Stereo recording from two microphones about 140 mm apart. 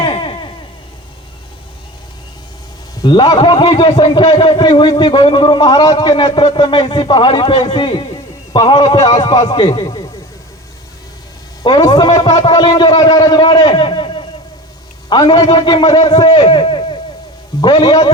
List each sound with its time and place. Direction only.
0.0 s a sound: 35° left (ahead or behind)
3.0 s a man's voice: 30° left (ahead or behind)
11.6 s a man's voice: 30° left (ahead or behind)